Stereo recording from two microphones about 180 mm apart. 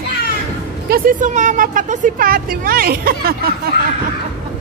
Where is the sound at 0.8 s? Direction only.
55° right (ahead or behind).